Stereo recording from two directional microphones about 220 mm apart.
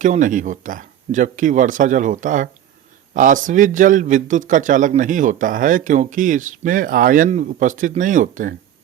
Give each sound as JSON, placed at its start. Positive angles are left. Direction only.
{"t": 0.0, "sound": "a man's voice", "side_deg": -35}